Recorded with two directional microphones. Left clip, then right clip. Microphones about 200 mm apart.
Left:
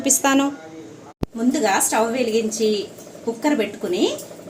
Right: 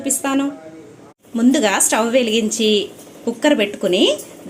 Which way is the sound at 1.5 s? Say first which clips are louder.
Right 2 dB; 45° right (ahead or behind).